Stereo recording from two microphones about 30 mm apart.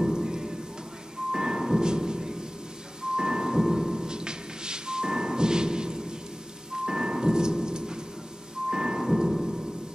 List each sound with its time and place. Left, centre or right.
0.1 s rain on surface: right
1.3 s music: centre